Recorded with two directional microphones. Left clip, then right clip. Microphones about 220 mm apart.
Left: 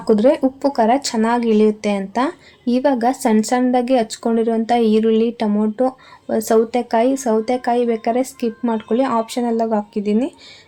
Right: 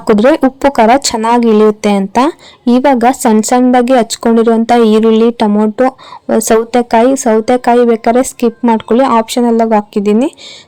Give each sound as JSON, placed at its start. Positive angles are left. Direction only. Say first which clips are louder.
{"t": 0.1, "sound": "a woman's voice", "louder": "right 6 dB", "side_deg": -35}